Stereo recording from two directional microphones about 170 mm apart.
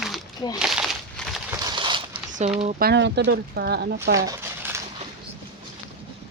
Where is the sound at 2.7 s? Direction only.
65° right (ahead or behind).